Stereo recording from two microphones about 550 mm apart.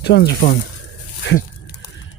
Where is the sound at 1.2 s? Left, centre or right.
Centre.